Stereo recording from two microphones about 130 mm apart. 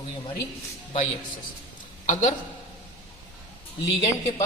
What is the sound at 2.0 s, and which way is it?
Speech, 70° left (ahead or behind).